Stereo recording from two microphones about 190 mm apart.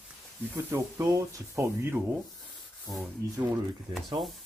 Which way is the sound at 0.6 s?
15° right (ahead or behind).